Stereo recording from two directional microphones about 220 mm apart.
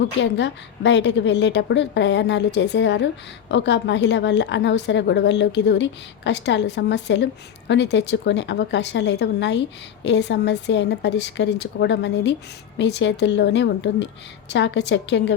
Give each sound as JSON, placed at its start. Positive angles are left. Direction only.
{"t": 0.0, "sound": "a woman's voice", "side_deg": 55}